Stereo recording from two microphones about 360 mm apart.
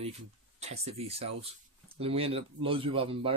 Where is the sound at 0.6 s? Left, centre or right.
Centre.